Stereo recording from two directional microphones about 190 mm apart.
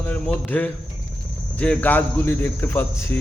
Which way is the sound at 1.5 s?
5° left (ahead or behind).